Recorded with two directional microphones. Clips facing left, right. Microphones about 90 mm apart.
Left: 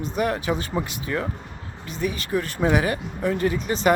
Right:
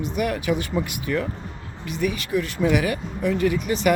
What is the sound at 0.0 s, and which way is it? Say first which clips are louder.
Speech: even; 35° left (ahead or behind).